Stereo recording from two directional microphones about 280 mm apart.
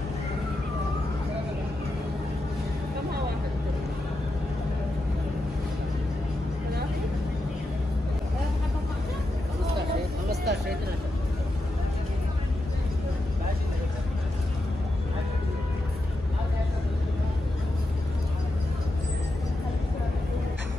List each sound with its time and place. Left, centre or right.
10.3 s vehicle: right